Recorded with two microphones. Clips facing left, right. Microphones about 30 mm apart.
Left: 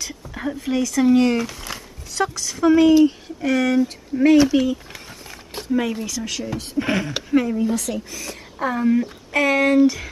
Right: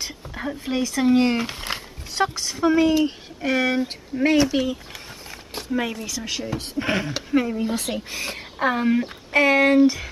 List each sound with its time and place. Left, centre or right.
0.3 s a sound: centre
0.6 s speech: right
2.6 s speech: centre
3.4 s speech: right
4.4 s speech: centre
7.6 s speech: right
8.9 s speech: right